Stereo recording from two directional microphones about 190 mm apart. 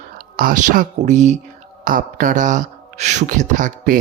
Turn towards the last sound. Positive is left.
turn(degrees=-40)  # may be behind; listen again after turning